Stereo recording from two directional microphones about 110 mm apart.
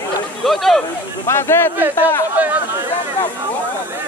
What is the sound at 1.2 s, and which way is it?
Speech, 25° left (ahead or behind).